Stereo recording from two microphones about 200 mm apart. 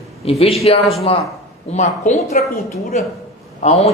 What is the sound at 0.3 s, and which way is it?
A man's voice, 30° left (ahead or behind).